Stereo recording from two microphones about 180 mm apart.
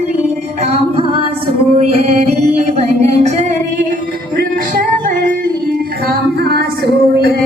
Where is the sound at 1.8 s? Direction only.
35° right (ahead or behind).